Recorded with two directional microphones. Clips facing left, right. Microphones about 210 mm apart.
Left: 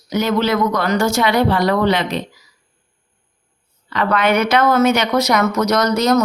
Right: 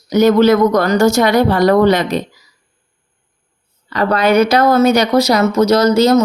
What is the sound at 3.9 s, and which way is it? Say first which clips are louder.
Speech: right 4 dB; 35° right (ahead or behind).